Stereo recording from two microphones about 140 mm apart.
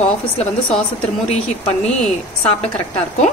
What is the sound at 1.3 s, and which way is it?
Speech, 50° left (ahead or behind).